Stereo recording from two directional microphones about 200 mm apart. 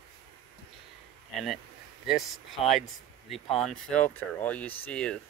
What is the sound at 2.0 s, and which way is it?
Speech, centre (ahead or behind).